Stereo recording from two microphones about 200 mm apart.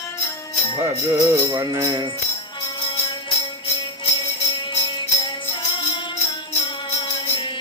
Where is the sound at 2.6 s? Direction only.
25° left (ahead or behind).